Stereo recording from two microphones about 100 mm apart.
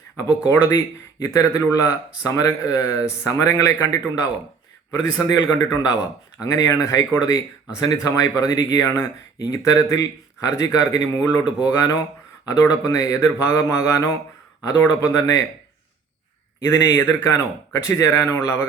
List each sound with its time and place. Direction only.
0.2 s speech: 30° left (ahead or behind)
8.0 s speech: 35° left (ahead or behind)
16.6 s speech: 30° left (ahead or behind)